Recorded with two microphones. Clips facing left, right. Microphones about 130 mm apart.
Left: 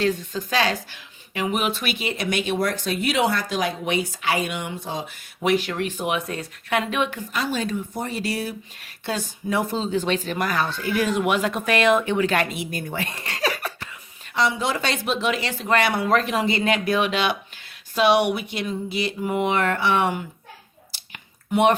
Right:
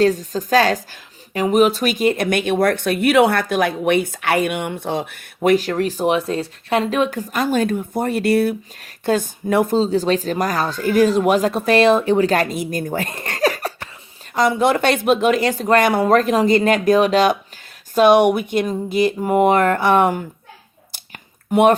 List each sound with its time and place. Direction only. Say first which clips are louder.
0.0 s a woman's voice: right 7 dB; 40° right (ahead or behind)
9.7 s a woman's voice: right 7 dB; 35° right (ahead or behind)
20.9 s a sound: right 5 dB; 50° right (ahead or behind)